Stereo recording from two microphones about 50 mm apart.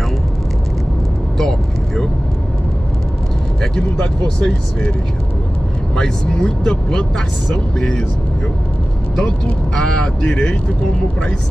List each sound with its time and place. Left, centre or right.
1.4 s vehicle: centre
3.7 s speech: centre
5.9 s speech: centre
9.8 s speech: centre